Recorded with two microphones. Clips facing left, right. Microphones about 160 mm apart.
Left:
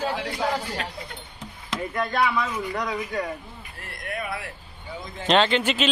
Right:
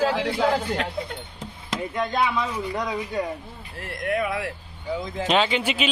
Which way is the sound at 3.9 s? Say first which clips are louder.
Right 7 dB; 90° right.